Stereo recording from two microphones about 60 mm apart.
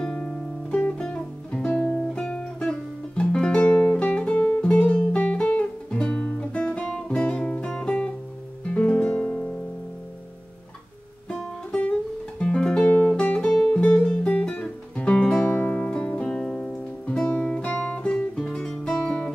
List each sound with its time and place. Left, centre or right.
0.0 s guitar: centre
0.9 s music: centre
1.7 s music: left
2.0 s music: centre
6.6 s guitar: left
6.9 s music: centre
11.2 s music: left
12.4 s music: centre
13.4 s music: centre
17.0 s guitar: centre
18.3 s music: centre
19.0 s music: left